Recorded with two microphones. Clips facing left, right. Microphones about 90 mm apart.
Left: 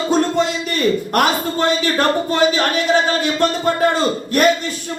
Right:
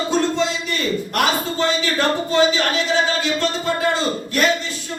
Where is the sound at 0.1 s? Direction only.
50° left (ahead or behind).